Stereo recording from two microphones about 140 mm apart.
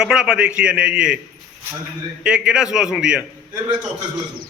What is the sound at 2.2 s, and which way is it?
A man's voice, 5° right (ahead or behind).